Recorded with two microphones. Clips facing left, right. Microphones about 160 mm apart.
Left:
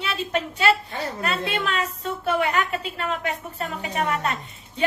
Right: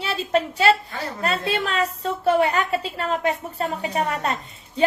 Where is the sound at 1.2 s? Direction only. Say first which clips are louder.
Right 3 dB; 35° right (ahead or behind).